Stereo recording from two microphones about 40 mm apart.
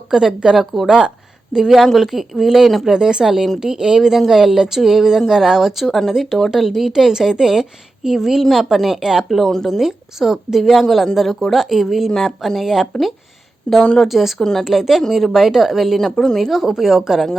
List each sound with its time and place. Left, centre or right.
0.1 s a woman's voice: centre
2.9 s a woman's voice: centre
9.3 s a woman's voice: centre
12.6 s a woman's voice: centre
12.9 s speech: centre
13.7 s speech: left
14.1 s a woman's voice: centre
16.0 s speech: centre
16.5 s a woman's voice: centre